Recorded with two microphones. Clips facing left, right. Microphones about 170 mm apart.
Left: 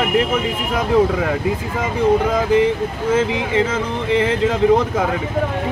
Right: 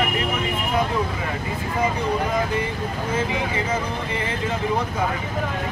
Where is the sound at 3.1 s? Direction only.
90° left.